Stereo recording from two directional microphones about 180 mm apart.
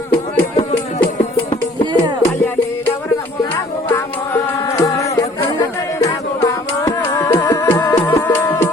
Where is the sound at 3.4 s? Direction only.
15° left (ahead or behind).